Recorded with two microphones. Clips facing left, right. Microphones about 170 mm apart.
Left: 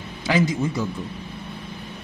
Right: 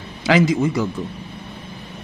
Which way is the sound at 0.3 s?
80° right.